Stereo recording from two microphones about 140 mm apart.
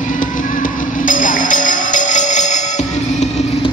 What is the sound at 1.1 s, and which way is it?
Music, 70° left (ahead or behind).